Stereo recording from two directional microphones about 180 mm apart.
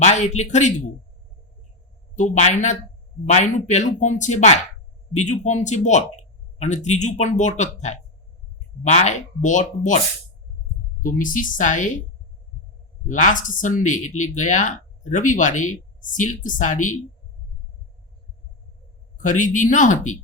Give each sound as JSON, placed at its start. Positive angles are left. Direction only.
{"t": 0.0, "sound": "speech", "side_deg": 40}
{"t": 2.1, "sound": "speech", "side_deg": 40}
{"t": 11.0, "sound": "speech", "side_deg": 50}
{"t": 13.1, "sound": "speech", "side_deg": 45}
{"t": 19.1, "sound": "speech", "side_deg": 45}